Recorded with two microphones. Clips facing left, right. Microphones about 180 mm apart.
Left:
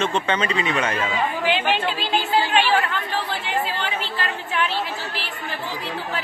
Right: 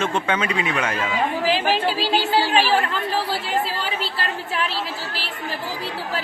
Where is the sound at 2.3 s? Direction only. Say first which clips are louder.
Left 1 dB; 35° right (ahead or behind).